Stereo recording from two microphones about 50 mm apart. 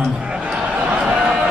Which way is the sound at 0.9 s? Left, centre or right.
Right.